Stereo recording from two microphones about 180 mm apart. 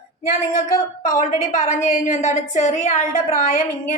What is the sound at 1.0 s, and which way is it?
A woman's voice, 45° left (ahead or behind).